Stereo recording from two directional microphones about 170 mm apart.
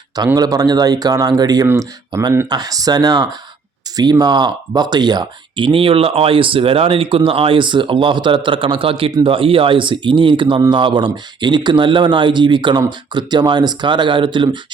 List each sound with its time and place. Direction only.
0.3 s speech: 20° right (ahead or behind)